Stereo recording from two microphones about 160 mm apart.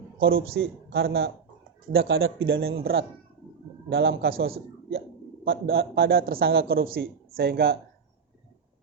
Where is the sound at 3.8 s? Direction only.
75° right (ahead or behind).